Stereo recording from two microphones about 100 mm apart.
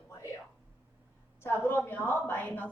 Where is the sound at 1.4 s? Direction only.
20° left (ahead or behind).